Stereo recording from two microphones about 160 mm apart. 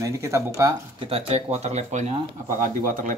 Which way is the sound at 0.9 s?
35° right (ahead or behind).